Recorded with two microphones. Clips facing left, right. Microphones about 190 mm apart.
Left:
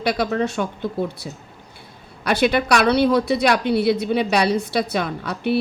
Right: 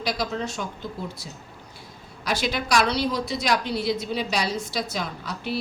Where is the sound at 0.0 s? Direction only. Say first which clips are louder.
Left 7 dB; 65° left (ahead or behind).